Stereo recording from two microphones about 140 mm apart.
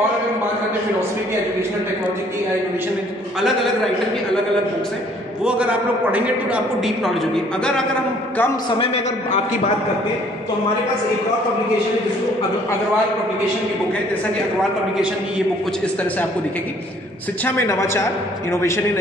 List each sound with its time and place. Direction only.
3.3 s a man's voice: centre (ahead or behind)
5.4 s a man's voice: 5° right (ahead or behind)
8.6 s a man's voice: 40° left (ahead or behind)
17.5 s a man's voice: 20° left (ahead or behind)